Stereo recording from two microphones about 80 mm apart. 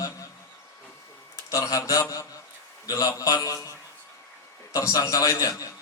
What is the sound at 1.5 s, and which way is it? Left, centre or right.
A man's voice, left.